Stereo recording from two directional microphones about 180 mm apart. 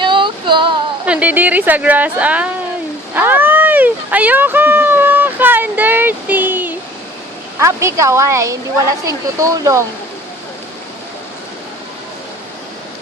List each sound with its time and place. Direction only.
0.0 s female singing: 25° right (ahead or behind)
1.0 s a woman's voice: 5° right (ahead or behind)
3.2 s a sound: 10° right (ahead or behind)
7.6 s a woman's voice: 15° right (ahead or behind)